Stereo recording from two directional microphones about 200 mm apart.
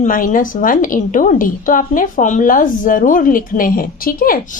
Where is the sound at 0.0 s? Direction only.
40° left (ahead or behind).